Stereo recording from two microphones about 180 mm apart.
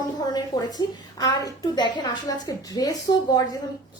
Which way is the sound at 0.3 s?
20° left (ahead or behind).